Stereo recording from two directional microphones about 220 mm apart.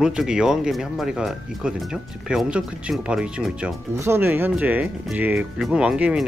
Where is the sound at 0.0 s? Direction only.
5° right (ahead or behind).